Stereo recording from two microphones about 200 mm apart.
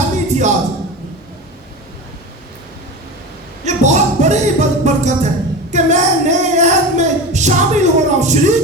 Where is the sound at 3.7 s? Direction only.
35° right (ahead or behind).